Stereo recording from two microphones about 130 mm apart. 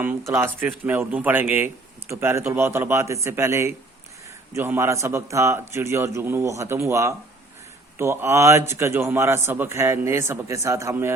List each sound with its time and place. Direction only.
0.0 s a man's voice: 15° right (ahead or behind)